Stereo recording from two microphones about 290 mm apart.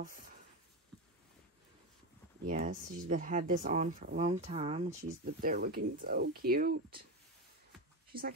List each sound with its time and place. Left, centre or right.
0.0 s speech: right
2.4 s speech: right
8.1 s speech: centre